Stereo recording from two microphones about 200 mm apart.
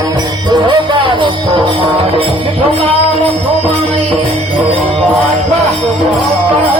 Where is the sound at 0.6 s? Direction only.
25° right (ahead or behind).